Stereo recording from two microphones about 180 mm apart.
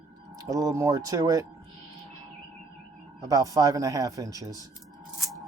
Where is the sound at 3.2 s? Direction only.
20° right (ahead or behind).